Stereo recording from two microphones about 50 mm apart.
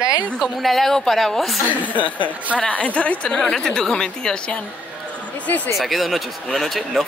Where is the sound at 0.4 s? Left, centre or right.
Centre.